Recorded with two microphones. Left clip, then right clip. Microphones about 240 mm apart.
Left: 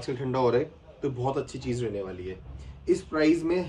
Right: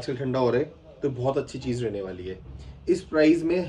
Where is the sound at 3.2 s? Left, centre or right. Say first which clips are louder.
Right 5 dB; centre.